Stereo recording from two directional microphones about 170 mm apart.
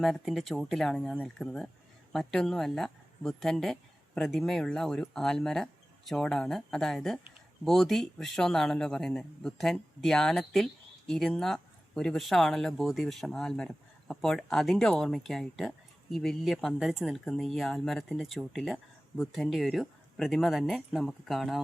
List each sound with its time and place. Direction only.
0.0 s speech: centre (ahead or behind)